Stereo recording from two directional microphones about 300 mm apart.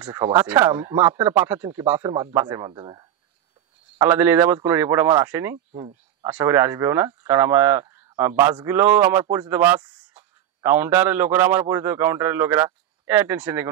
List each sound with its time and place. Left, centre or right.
0.0 s speech: centre
5.7 s speech: right
6.2 s speech: centre